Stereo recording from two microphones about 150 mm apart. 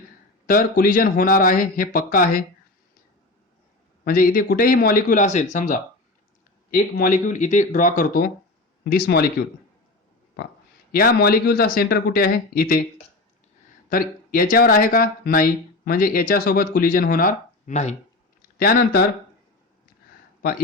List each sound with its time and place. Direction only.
0.4 s speech: 70° left (ahead or behind)
4.0 s speech: 70° left (ahead or behind)
8.8 s speech: 85° left
10.9 s speech: 90° left
13.9 s speech: 75° left (ahead or behind)
18.5 s speech: 90° left